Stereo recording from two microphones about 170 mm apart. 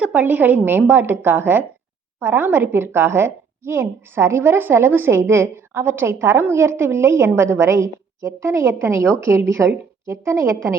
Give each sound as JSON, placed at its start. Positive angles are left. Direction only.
{"t": 0.0, "sound": "a woman's voice", "side_deg": -10}